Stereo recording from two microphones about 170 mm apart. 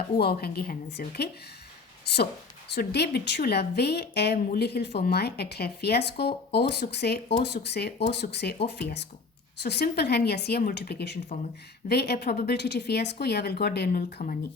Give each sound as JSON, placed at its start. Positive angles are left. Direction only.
{"t": 0.2, "sound": "speech", "side_deg": 65}
{"t": 11.9, "sound": "speech", "side_deg": 75}